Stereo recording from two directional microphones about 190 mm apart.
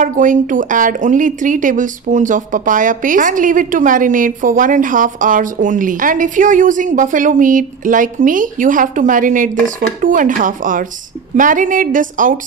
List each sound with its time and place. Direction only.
0.0 s speech: 45° right (ahead or behind)